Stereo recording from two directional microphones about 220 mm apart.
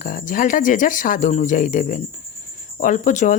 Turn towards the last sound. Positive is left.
turn(degrees=35)  # may be behind; listen again after turning